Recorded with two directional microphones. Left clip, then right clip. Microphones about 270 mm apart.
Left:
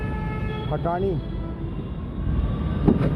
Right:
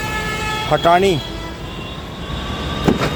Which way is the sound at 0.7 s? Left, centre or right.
Right.